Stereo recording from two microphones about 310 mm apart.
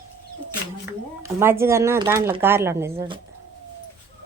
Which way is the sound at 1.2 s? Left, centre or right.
Centre.